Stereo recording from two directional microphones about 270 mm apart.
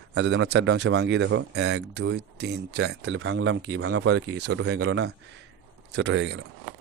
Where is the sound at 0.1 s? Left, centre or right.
Right.